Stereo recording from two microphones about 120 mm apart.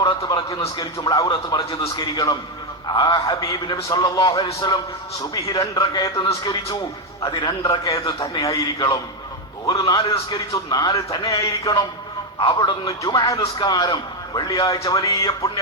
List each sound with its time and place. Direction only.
0.0 s a man's voice: 30° left (ahead or behind)